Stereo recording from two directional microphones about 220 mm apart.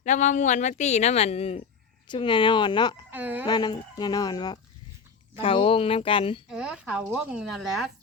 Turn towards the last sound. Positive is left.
turn(degrees=0)  # may be behind; listen again after turning